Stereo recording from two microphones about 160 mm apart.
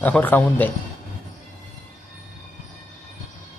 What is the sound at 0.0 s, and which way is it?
Speech, 10° left (ahead or behind).